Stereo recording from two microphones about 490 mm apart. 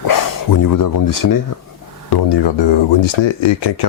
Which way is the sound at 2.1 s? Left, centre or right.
Left.